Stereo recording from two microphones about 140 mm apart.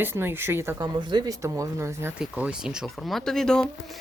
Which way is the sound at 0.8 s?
30° right (ahead or behind).